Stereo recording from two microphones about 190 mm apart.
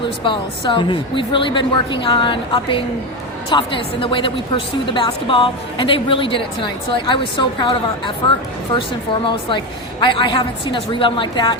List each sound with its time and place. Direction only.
0.3 s a woman's voice: 25° left (ahead or behind)
9.2 s a woman's voice: 25° left (ahead or behind)